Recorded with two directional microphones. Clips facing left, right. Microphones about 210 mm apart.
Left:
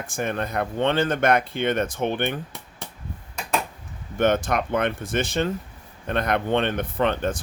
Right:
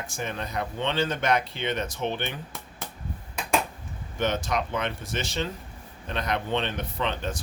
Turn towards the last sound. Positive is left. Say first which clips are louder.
# left 7 dB
turn(degrees=50)  # may be behind; listen again after turning